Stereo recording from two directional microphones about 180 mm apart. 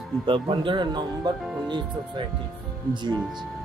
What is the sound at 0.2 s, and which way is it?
Speech, 25° right (ahead or behind).